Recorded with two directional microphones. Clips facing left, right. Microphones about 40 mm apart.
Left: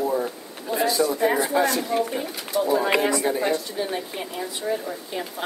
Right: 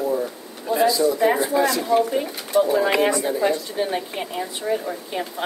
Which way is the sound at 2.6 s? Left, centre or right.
Centre.